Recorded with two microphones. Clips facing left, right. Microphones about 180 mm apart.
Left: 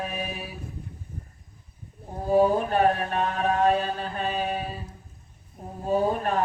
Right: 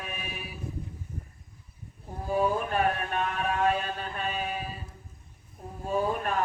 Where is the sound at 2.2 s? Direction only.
35° left (ahead or behind).